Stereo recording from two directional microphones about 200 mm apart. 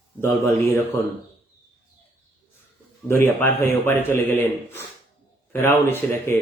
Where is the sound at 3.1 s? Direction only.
10° left (ahead or behind).